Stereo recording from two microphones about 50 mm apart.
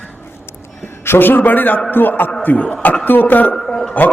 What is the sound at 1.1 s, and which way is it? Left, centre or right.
A man's voice, left.